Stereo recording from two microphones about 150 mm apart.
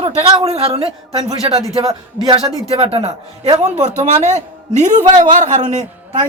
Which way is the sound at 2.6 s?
45° right (ahead or behind).